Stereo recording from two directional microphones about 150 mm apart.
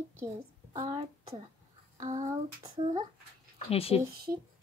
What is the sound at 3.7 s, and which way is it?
Speech, 40° left (ahead or behind).